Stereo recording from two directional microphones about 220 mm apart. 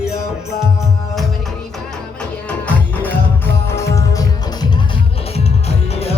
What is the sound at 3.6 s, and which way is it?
Music, 10° left (ahead or behind).